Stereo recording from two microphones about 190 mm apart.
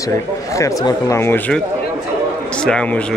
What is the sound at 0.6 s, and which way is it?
Speech, 15° left (ahead or behind).